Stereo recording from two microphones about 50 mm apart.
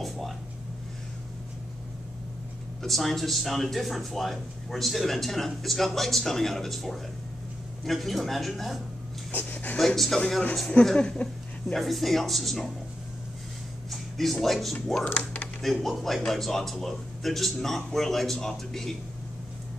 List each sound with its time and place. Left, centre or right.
0.0 s a sound: centre
2.8 s speech: centre
9.3 s speech: left
9.8 s speech: centre
11.0 s speech: left
11.7 s speech: centre
13.8 s speech: centre